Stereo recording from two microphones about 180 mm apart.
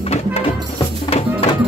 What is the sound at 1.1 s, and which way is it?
Music, 35° left (ahead or behind).